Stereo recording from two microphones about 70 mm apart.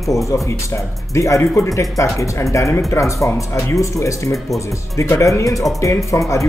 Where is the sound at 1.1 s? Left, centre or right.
Left.